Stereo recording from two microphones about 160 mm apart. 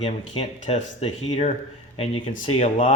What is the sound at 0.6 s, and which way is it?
Speech, 45° left (ahead or behind).